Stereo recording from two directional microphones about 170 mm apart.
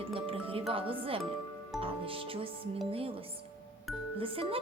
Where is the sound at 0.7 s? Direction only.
30° right (ahead or behind).